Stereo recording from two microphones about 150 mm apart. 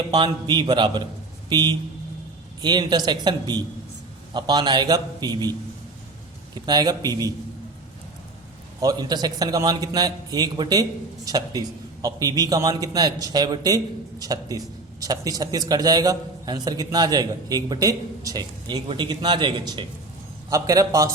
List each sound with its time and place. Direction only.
0.1 s a man's voice: 30° right (ahead or behind)
8.8 s a man's voice: 25° right (ahead or behind)